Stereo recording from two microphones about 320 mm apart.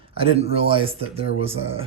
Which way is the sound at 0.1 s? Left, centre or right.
Centre.